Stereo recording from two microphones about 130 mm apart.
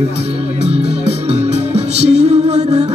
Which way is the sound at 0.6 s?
55° right (ahead or behind).